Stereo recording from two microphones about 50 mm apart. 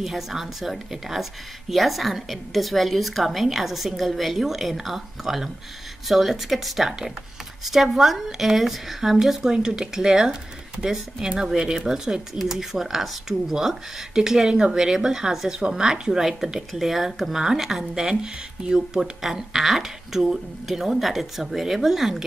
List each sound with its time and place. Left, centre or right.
0.0 s a woman's voice: centre